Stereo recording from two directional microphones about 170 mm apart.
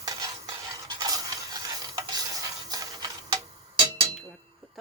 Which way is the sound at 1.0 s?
20° right (ahead or behind).